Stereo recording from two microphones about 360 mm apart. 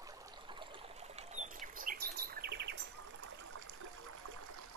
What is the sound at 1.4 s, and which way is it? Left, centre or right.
Chirp, right.